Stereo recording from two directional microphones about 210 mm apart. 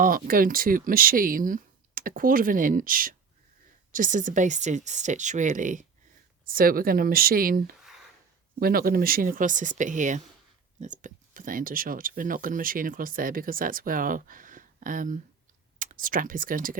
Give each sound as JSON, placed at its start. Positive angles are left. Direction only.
{"t": 0.0, "sound": "speech", "side_deg": -45}